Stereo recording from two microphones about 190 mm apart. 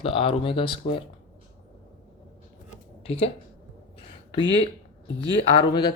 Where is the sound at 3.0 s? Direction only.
30° left (ahead or behind).